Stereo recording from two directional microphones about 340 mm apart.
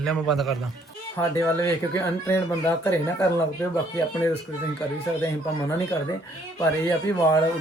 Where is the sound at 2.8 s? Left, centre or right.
Centre.